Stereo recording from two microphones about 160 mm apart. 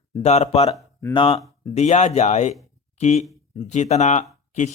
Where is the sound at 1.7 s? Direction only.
45° left (ahead or behind).